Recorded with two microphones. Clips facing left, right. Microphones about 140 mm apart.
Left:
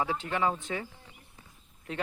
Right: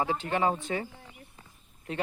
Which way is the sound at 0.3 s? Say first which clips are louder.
Right 2 dB; 40° right (ahead or behind).